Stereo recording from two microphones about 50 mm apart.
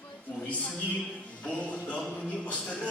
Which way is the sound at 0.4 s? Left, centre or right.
Left.